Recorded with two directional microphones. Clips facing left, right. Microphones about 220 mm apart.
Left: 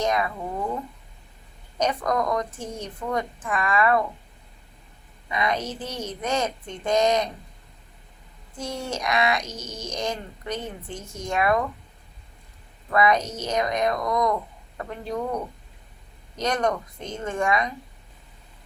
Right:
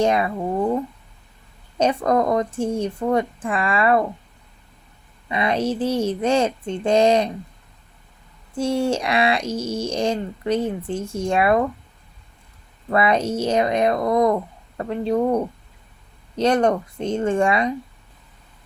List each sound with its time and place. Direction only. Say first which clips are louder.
0.0 s speech: right 6 dB; 30° right (ahead or behind)
1.8 s speech: right 6 dB; 30° right (ahead or behind)
5.3 s speech: right 6 dB; 30° right (ahead or behind)
8.5 s speech: right 10 dB; 30° right (ahead or behind)
12.9 s speech: right 3 dB; 30° right (ahead or behind)